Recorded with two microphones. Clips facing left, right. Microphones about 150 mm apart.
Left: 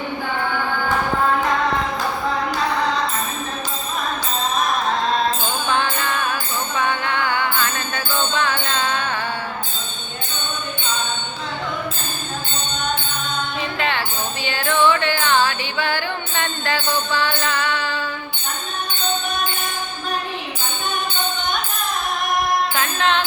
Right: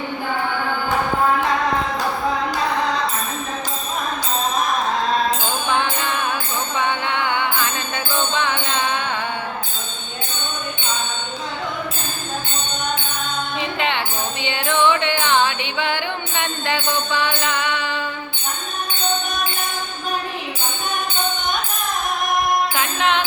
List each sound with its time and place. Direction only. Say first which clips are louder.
5.6 s music: left 1 dB; 15° right (ahead or behind)
13.6 s music: right 1 dB; 20° right (ahead or behind)
22.7 s music: even; 15° right (ahead or behind)